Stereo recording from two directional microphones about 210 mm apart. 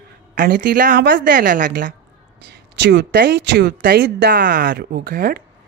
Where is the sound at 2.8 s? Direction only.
50° right (ahead or behind).